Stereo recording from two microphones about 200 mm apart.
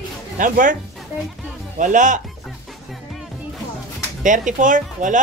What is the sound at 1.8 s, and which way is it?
Speech, 40° right (ahead or behind).